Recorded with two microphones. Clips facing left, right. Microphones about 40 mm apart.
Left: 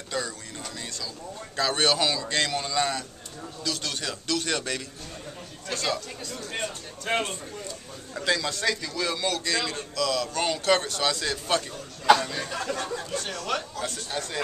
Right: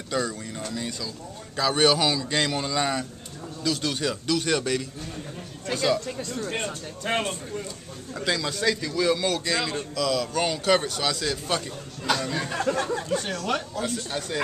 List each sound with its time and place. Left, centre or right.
0.1 s a man's voice: centre
7.1 s a man's voice: centre
12.4 s speech: right
13.5 s speech: centre